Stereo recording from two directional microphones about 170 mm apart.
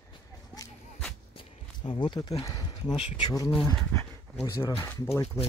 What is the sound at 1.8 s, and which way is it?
Speech, 25° left (ahead or behind).